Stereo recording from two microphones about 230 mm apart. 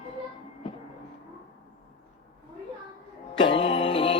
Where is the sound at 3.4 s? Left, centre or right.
Left.